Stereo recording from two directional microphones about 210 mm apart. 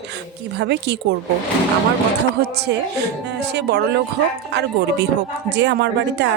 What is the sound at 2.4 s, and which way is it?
A woman's voice, 50° right (ahead or behind).